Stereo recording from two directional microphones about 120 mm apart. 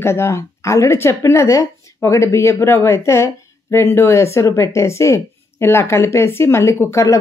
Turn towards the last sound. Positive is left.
turn(degrees=25)  # may be behind; listen again after turning